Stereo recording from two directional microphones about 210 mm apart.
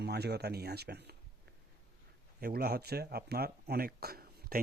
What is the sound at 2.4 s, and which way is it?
Speech, 45° right (ahead or behind).